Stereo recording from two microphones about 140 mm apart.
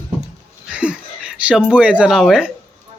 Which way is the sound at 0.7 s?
10° right (ahead or behind).